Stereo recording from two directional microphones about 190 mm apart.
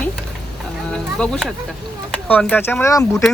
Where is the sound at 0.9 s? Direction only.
5° left (ahead or behind).